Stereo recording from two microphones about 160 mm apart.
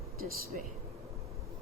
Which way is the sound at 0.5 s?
60° right (ahead or behind).